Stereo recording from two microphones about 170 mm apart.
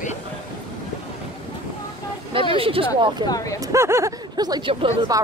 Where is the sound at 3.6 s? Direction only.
20° right (ahead or behind).